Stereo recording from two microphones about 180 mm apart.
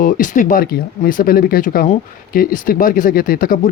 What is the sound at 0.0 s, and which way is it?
Speech, 50° left (ahead or behind).